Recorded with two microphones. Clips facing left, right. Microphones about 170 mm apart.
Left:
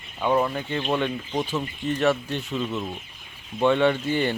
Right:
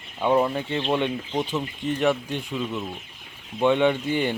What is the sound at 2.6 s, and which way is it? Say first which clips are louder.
Speech: left 1 dB; 10° left (ahead or behind).